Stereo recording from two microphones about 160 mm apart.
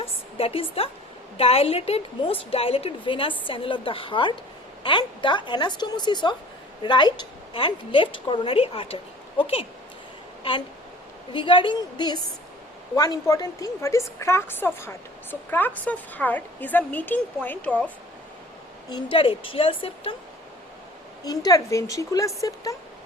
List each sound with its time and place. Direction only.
0.0 s a sound: 35° left (ahead or behind)
1.4 s a woman's voice: 40° left (ahead or behind)
11.3 s a woman's voice: 30° left (ahead or behind); by 17.9 s 10° left (ahead or behind)
19.1 s a woman's voice: 35° left (ahead or behind)
21.2 s speech: 25° left (ahead or behind)